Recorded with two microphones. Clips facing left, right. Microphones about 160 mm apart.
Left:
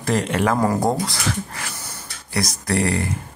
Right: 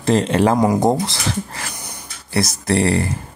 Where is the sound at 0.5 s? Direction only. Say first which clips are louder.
Right 4 dB; 15° right (ahead or behind).